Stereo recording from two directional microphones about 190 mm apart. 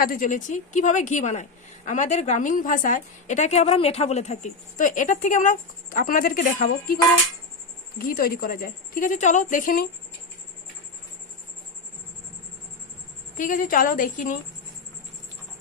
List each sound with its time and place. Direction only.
0.0 s a woman's voice: 45° left (ahead or behind)
13.3 s a woman's voice: 45° left (ahead or behind)